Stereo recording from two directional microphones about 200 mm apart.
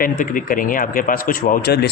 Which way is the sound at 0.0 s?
45° left (ahead or behind).